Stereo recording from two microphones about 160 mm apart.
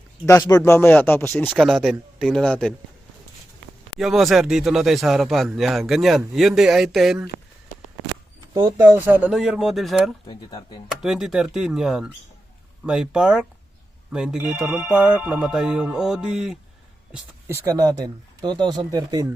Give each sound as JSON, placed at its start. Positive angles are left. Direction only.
{"t": 0.3, "sound": "speech", "side_deg": 20}
{"t": 1.6, "sound": "speech", "side_deg": 0}
{"t": 4.0, "sound": "speech", "side_deg": 0}
{"t": 8.5, "sound": "speech", "side_deg": -25}
{"t": 9.0, "sound": "speech", "side_deg": -10}
{"t": 10.2, "sound": "speech", "side_deg": 30}
{"t": 11.0, "sound": "speech", "side_deg": -5}
{"t": 17.1, "sound": "speech", "side_deg": -15}